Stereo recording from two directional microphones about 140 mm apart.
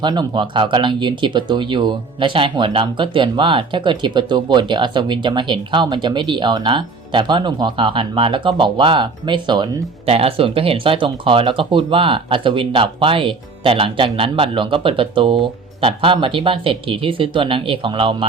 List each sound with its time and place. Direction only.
0.0 s speech: 30° right (ahead or behind)